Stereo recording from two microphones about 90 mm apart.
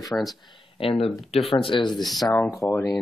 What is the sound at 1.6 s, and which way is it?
Speech, 60° left (ahead or behind).